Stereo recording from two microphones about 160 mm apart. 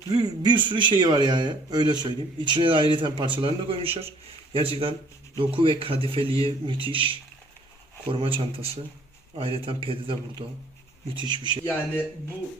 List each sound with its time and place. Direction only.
0.1 s a man's voice: 25° right (ahead or behind)